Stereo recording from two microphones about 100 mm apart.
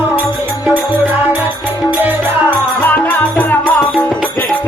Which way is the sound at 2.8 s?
20° left (ahead or behind).